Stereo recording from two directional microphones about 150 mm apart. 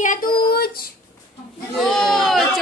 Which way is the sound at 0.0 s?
65° left (ahead or behind).